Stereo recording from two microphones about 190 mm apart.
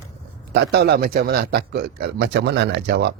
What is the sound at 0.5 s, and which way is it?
Speech, 60° right (ahead or behind).